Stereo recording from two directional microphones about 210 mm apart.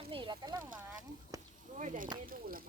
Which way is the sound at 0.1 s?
25° right (ahead or behind).